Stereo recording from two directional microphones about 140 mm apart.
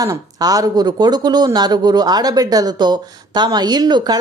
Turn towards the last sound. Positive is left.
turn(degrees=-30)  # may be behind; listen again after turning